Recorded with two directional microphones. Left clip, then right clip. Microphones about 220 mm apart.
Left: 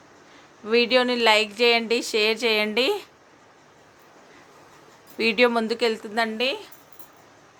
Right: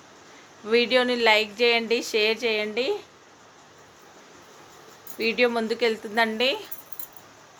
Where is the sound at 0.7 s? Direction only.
15° left (ahead or behind).